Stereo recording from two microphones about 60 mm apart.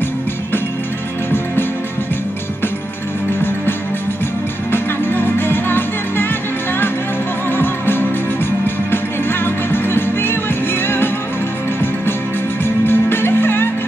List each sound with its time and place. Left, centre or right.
4.7 s music: left
7.5 s music: left
12.6 s music: left